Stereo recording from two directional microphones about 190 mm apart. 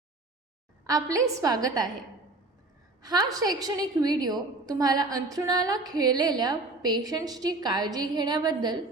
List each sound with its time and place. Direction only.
0.9 s a woman's voice: 20° right (ahead or behind)
3.0 s a woman's voice: 20° right (ahead or behind)